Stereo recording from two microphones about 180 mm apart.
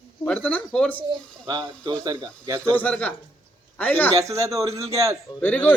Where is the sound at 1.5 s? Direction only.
20° right (ahead or behind).